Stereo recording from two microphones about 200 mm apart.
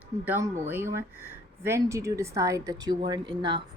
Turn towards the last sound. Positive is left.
turn(degrees=-20)  # may be behind; listen again after turning